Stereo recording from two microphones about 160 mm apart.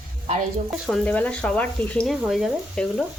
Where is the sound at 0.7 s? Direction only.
Centre (ahead or behind).